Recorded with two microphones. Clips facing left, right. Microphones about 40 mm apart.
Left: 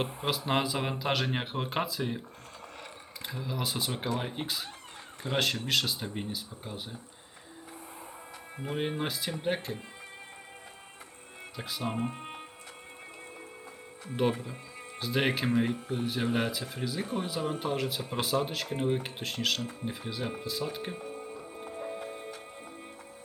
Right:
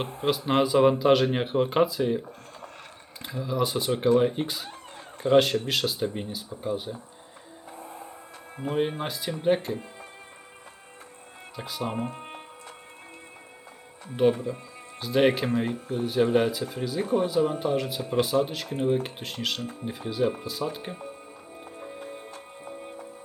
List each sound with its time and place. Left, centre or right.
0.0 s speech: centre
8.5 s speech: centre
11.5 s speech: centre
14.0 s speech: centre
21.2 s music: centre